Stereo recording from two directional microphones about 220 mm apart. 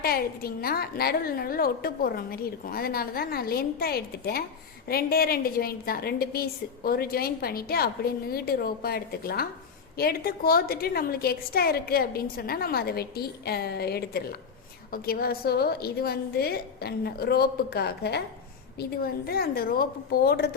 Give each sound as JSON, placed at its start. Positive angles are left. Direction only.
{"t": 0.0, "sound": "a woman's voice", "side_deg": 45}